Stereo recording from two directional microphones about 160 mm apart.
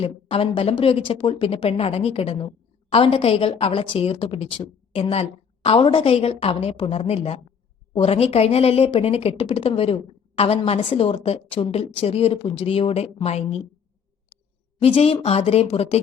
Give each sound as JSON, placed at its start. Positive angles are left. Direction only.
{"t": 0.0, "sound": "speech", "side_deg": 35}
{"t": 14.8, "sound": "speech", "side_deg": 35}